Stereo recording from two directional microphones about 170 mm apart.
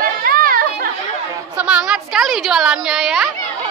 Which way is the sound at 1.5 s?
5° right (ahead or behind).